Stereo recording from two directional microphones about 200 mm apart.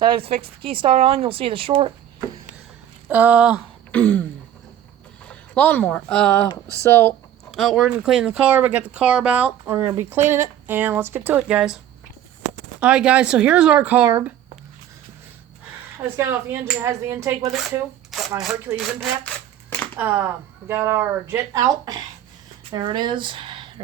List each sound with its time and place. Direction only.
0.0 s speech: 20° right (ahead or behind)
3.1 s speech: 10° right (ahead or behind)
3.9 s a sound: 10° left (ahead or behind)
5.3 s speech: 10° left (ahead or behind)
6.8 s a sound: 10° left (ahead or behind)
7.5 s speech: centre (ahead or behind)
12.8 s speech: 5° right (ahead or behind)
16.0 s speech: 10° right (ahead or behind)
18.3 s speech: centre (ahead or behind)
20.0 s speech: 10° right (ahead or behind)